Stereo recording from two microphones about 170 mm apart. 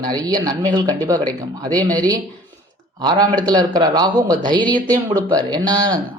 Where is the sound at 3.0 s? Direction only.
25° right (ahead or behind).